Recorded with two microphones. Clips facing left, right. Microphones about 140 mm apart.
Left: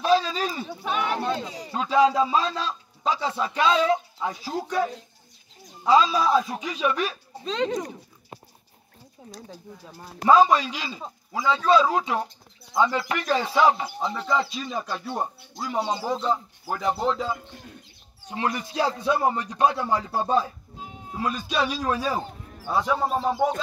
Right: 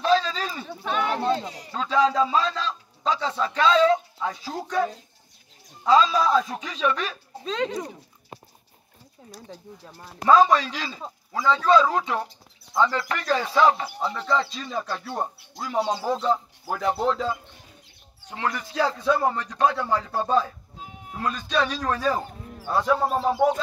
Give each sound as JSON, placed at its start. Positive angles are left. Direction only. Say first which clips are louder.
{"t": 0.0, "sound": "a sound", "louder": "even", "side_deg": 10}
{"t": 1.7, "sound": "a man's voice", "louder": "left 2 dB", "side_deg": 15}
{"t": 5.9, "sound": "a man's voice", "louder": "even", "side_deg": 10}
{"t": 7.4, "sound": "speech", "louder": "left 1 dB", "side_deg": -5}
{"t": 9.5, "sound": "a man's voice", "louder": "even", "side_deg": 5}
{"t": 18.3, "sound": "a man's voice", "louder": "left 1 dB", "side_deg": 15}
{"t": 20.8, "sound": "music", "louder": "left 1 dB", "side_deg": 25}
{"t": 21.2, "sound": "a man's voice", "louder": "right 1 dB", "side_deg": 10}